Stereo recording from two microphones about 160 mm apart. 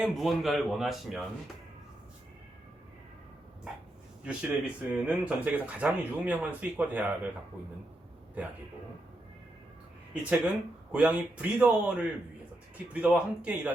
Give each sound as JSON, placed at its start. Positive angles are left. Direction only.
{"t": 0.0, "sound": "a man's voice", "side_deg": 0}
{"t": 4.3, "sound": "speech", "side_deg": -5}
{"t": 10.2, "sound": "speech", "side_deg": -5}